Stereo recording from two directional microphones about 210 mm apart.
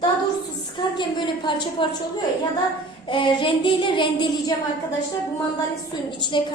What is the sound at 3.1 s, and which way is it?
A woman's voice, 20° left (ahead or behind).